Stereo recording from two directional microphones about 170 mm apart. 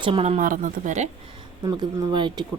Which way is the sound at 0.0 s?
35° right (ahead or behind).